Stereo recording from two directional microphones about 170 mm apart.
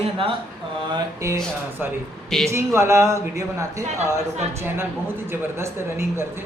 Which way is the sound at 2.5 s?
15° right (ahead or behind).